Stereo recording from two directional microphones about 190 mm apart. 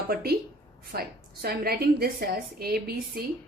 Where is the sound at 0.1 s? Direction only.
50° right (ahead or behind).